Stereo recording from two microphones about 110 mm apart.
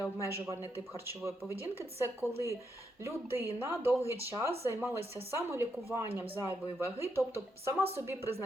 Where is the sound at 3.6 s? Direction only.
20° right (ahead or behind).